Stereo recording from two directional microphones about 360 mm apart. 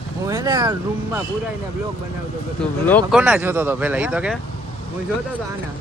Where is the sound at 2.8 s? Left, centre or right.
Centre.